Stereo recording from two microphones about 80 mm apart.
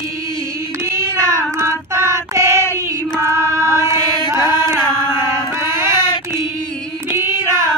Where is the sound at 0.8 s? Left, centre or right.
Right.